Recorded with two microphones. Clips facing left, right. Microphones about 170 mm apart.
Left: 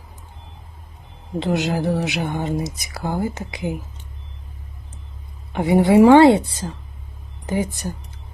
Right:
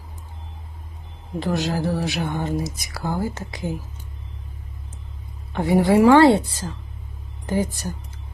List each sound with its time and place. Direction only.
1.4 s speech: 20° left (ahead or behind)
5.5 s speech: 20° left (ahead or behind)